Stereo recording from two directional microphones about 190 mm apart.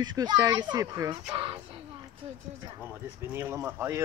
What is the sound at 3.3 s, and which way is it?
Speech, 10° right (ahead or behind).